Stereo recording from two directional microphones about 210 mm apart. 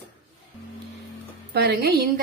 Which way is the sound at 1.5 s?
50° right (ahead or behind).